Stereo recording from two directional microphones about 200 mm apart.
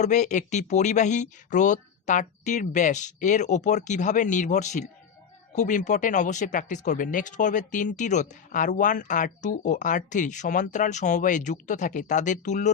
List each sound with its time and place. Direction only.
0.0 s speech: 35° left (ahead or behind)